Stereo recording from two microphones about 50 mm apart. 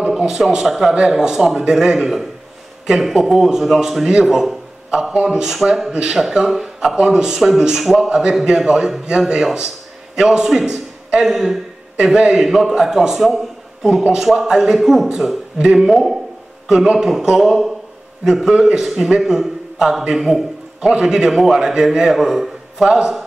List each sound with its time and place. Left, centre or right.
0.7 s a man's voice: centre
4.0 s a man's voice: centre
7.0 s a man's voice: centre
15.9 s a man's voice: centre
16.6 s a man's voice: centre